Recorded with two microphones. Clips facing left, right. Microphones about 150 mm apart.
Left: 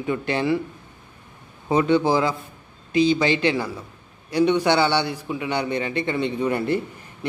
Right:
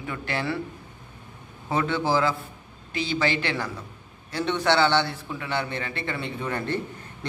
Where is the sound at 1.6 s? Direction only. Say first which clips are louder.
Left 6 dB; 15° left (ahead or behind).